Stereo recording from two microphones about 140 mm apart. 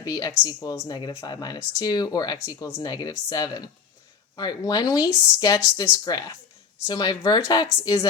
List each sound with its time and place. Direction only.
0.0 s speech: 25° left (ahead or behind)